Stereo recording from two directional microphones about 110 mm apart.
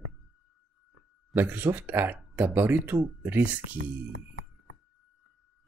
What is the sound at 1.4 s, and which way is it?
Speech, 20° right (ahead or behind).